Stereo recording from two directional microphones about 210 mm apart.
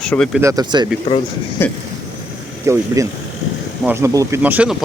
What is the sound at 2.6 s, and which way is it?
Speech, 15° right (ahead or behind).